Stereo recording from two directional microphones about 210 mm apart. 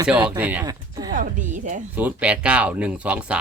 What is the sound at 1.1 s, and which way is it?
Speech, 40° right (ahead or behind).